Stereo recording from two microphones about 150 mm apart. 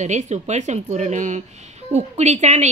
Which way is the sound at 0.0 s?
50° right (ahead or behind).